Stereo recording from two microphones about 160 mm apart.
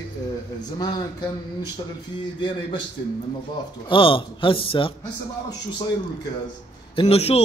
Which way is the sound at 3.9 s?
30° left (ahead or behind).